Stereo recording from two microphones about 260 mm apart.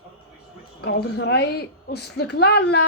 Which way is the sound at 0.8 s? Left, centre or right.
Left.